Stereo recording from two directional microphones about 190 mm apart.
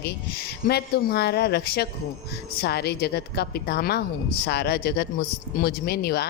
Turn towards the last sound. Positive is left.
turn(degrees=55)  # may be behind; listen again after turning